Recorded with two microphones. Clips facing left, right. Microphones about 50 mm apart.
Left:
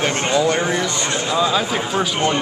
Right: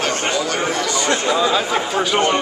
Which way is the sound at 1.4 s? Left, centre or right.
Centre.